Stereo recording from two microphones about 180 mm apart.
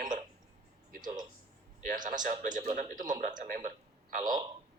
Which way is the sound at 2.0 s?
45° right (ahead or behind).